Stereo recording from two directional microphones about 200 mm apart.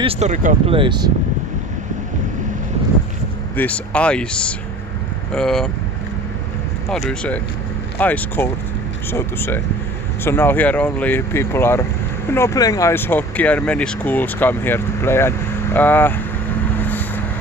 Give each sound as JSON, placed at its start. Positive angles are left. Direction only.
{"t": 0.0, "sound": "speech", "side_deg": -30}
{"t": 0.7, "sound": "speech", "side_deg": -20}
{"t": 3.5, "sound": "speech", "side_deg": 5}
{"t": 6.9, "sound": "speech", "side_deg": 5}
{"t": 16.6, "sound": "vehicle", "side_deg": 10}